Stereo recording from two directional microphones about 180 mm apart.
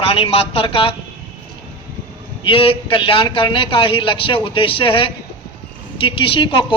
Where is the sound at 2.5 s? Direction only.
30° left (ahead or behind).